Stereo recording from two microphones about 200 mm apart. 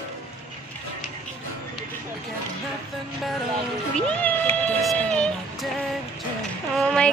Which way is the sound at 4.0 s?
5° left (ahead or behind).